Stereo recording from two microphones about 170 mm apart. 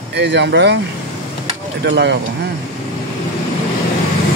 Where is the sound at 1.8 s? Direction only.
90° right.